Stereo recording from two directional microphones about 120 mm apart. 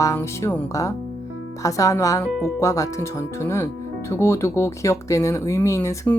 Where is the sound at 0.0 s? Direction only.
25° left (ahead or behind).